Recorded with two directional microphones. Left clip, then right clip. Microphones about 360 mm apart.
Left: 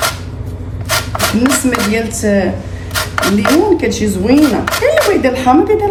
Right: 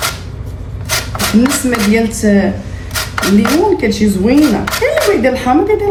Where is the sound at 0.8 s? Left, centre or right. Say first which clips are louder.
Left 2 dB; centre.